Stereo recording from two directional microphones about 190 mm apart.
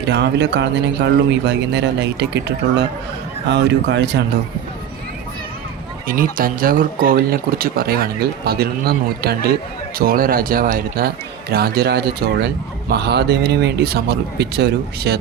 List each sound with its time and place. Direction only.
0.0 s speech: 65° right (ahead or behind)
6.1 s speech: 50° right (ahead or behind)